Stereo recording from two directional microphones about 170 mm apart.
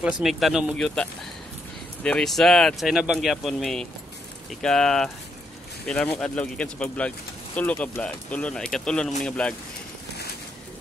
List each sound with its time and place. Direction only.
0.0 s speech: centre (ahead or behind)
2.0 s speech: 5° left (ahead or behind)